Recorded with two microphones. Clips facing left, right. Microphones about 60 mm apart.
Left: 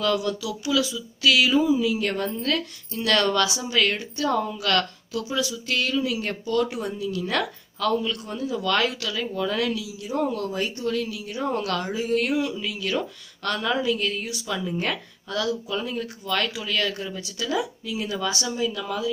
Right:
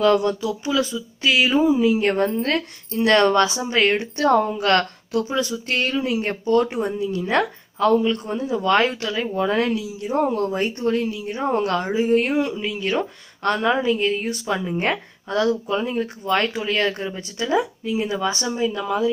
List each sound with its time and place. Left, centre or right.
0.0 s speech: right
4.2 s speech: right
4.5 s speech: right
14.2 s speech: right